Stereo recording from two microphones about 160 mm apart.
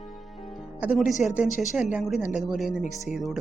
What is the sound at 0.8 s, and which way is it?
Speech, 5° right (ahead or behind).